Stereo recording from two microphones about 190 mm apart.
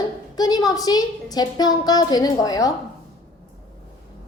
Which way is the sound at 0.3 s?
20° left (ahead or behind).